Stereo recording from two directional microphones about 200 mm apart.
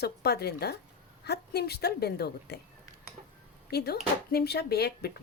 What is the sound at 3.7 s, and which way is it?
Speech, 55° left (ahead or behind).